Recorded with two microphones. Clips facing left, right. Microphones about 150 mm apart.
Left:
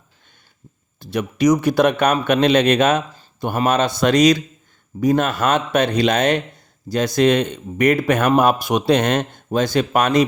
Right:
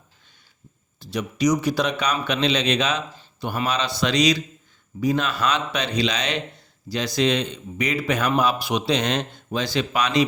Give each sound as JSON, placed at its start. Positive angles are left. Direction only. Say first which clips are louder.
{"t": 0.9, "sound": "a man's voice", "louder": "left 5 dB", "side_deg": 55}